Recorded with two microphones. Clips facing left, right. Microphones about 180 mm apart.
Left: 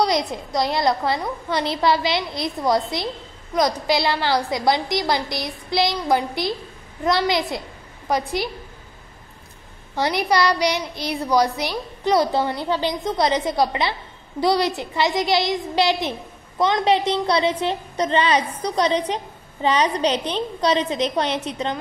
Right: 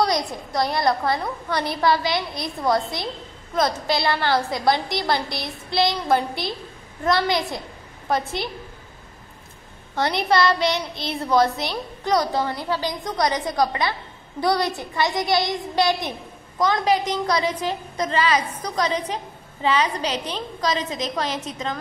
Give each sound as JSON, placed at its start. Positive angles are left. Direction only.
{"t": 0.0, "sound": "a woman's voice", "side_deg": 20}
{"t": 9.9, "sound": "a woman's voice", "side_deg": 15}